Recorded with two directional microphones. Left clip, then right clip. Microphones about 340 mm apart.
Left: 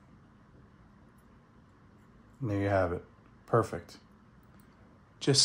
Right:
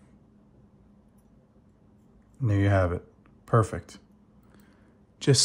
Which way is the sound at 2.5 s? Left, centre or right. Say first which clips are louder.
Right 3 dB; right.